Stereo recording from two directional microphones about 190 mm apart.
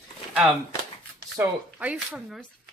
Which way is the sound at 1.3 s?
5° right (ahead or behind).